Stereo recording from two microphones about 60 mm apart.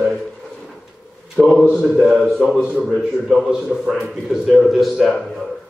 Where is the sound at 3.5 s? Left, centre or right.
Centre.